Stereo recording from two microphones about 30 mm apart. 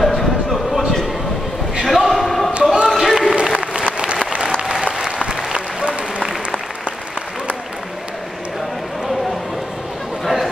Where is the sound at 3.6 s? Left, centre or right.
Right.